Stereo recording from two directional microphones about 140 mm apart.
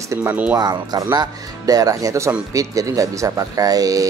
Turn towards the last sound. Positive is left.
turn(degrees=-25)  # may be behind; listen again after turning